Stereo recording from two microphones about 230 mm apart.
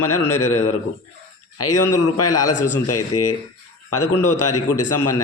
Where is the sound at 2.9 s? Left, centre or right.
Left.